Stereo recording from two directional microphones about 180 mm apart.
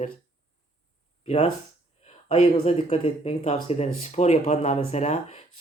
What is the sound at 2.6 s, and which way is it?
Speech, 35° left (ahead or behind).